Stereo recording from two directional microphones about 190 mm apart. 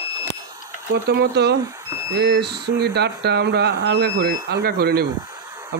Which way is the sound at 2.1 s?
60° right (ahead or behind).